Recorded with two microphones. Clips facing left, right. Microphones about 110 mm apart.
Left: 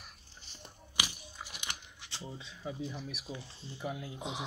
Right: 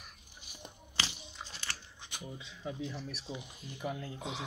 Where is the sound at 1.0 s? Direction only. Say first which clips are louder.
Even; 15° left (ahead or behind).